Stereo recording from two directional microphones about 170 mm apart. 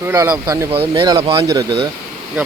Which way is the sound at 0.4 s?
20° right (ahead or behind).